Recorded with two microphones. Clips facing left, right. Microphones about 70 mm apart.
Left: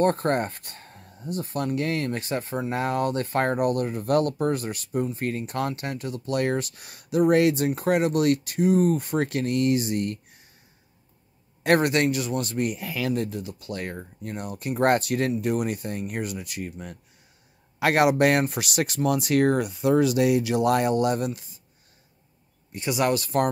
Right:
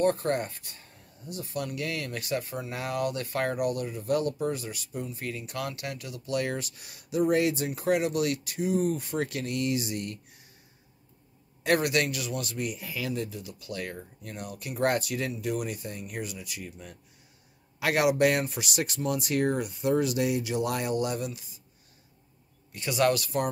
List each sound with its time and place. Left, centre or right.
0.0 s speech: left
11.6 s speech: left
22.7 s speech: left